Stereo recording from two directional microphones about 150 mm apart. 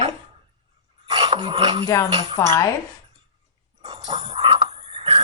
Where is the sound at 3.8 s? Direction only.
30° right (ahead or behind).